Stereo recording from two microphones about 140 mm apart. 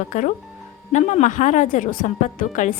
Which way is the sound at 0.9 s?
60° left (ahead or behind).